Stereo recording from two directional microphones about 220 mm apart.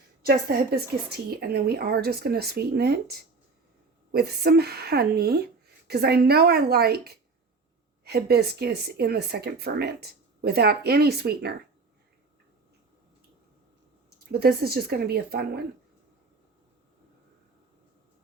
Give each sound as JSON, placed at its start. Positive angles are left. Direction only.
{"t": 0.2, "sound": "speech", "side_deg": -45}
{"t": 14.3, "sound": "speech", "side_deg": -45}